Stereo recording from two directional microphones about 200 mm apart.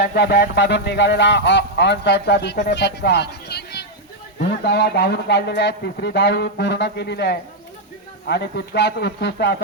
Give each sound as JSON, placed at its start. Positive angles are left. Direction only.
{"t": 0.0, "sound": "speech", "side_deg": 50}